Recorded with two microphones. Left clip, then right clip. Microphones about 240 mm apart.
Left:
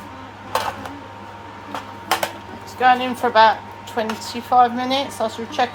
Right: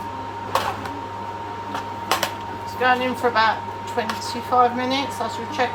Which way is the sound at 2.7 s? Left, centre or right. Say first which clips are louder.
Left 4 dB; left.